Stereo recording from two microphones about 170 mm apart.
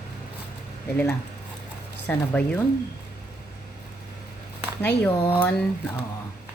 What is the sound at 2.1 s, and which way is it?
Speech, 10° left (ahead or behind).